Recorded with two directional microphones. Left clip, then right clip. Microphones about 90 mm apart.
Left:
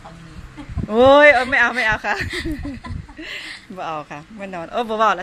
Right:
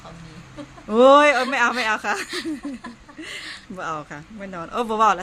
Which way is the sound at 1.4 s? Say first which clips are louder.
Left 3 dB; 20° right (ahead or behind).